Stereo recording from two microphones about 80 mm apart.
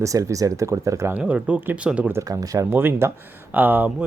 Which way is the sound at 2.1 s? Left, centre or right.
Right.